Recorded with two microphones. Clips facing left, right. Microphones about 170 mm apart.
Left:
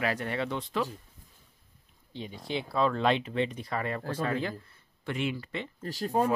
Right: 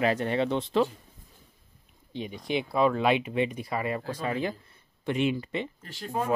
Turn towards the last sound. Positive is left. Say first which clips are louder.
# left 4 dB
turn(degrees=35)  # may be behind; listen again after turning